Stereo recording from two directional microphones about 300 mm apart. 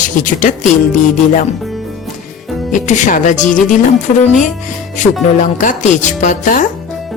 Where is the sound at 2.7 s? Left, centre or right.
Left.